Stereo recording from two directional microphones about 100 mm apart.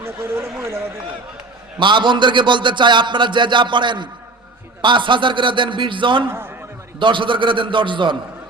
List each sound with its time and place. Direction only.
0.6 s speech: 25° right (ahead or behind)
1.8 s speech: 50° right (ahead or behind)
6.2 s a man's voice: 25° right (ahead or behind)
7.0 s a man's voice: 55° right (ahead or behind)